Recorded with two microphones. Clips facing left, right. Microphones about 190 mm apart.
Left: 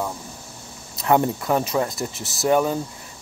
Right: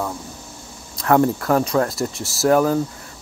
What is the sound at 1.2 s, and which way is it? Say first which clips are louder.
Speech: right 4 dB; 5° left (ahead or behind).